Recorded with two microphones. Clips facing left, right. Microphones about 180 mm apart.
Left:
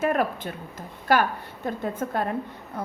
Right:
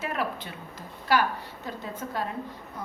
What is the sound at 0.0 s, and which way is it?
A woman's voice, 50° left (ahead or behind).